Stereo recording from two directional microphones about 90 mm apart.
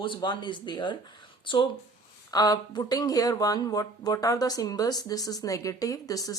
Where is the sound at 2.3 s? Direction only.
45° left (ahead or behind).